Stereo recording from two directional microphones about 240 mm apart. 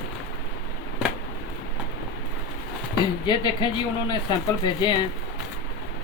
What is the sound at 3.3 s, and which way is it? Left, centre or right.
Speech, centre.